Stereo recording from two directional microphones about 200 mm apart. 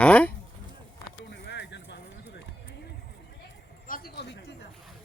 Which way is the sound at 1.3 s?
60° left (ahead or behind).